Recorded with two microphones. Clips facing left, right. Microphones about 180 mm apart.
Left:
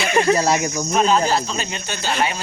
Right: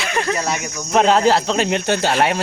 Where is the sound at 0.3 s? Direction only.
35° left (ahead or behind).